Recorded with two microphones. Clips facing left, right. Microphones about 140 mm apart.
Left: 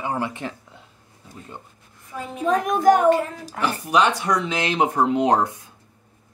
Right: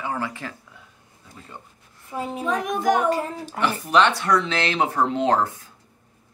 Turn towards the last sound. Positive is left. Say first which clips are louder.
# left 2 dB
turn(degrees=15)  # may be behind; listen again after turning